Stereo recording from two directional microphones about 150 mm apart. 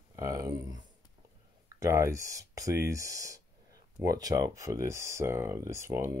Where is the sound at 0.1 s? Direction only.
20° right (ahead or behind).